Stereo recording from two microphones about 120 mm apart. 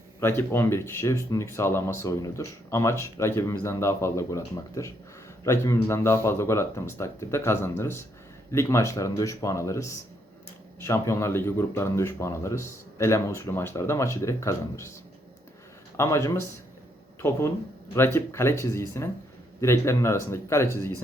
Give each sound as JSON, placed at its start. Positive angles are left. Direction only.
{"t": 0.2, "sound": "speech", "side_deg": 20}
{"t": 16.0, "sound": "speech", "side_deg": 25}
{"t": 17.9, "sound": "speech", "side_deg": 20}